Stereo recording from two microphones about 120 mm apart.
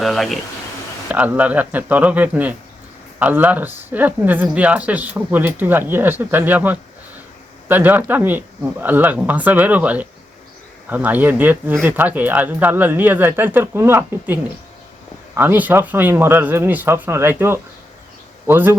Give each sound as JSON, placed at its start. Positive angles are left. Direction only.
{"t": 0.0, "sound": "speech", "side_deg": 0}
{"t": 1.0, "sound": "speech", "side_deg": -15}
{"t": 15.4, "sound": "speech", "side_deg": -15}